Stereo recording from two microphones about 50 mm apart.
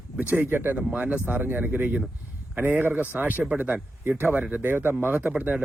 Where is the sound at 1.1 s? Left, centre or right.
Right.